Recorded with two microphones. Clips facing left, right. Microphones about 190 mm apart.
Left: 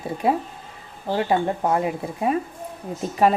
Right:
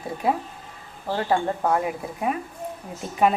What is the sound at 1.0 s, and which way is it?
A woman's voice, 20° left (ahead or behind).